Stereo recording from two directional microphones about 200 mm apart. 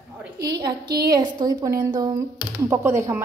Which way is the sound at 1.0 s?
20° right (ahead or behind).